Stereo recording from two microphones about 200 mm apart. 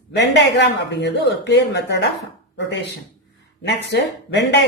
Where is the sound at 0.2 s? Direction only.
60° left (ahead or behind).